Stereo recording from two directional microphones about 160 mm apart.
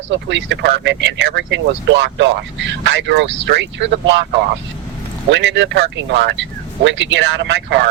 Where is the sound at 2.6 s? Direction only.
90° right.